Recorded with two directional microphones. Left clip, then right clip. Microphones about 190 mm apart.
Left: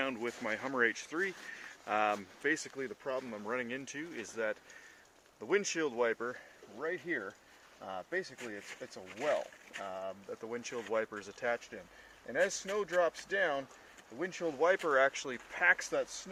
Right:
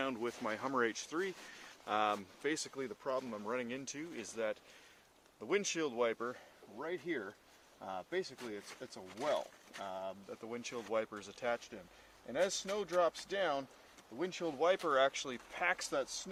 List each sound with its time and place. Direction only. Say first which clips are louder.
0.0 s speech: left 2 dB; 10° right (ahead or behind)
9.3 s speech: left 2 dB; 15° right (ahead or behind)
9.8 s speech: left 2 dB; 5° left (ahead or behind)